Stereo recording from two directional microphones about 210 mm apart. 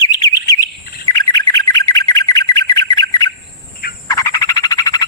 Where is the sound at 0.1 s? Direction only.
20° left (ahead or behind).